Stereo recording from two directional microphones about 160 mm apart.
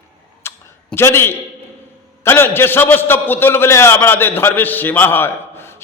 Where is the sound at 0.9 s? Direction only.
15° left (ahead or behind).